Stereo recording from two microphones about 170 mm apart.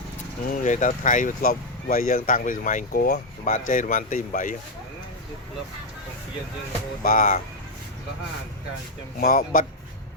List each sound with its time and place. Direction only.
0.4 s speech: 50° left (ahead or behind)
7.0 s speech: 55° left (ahead or behind)
9.2 s speech: 50° left (ahead or behind)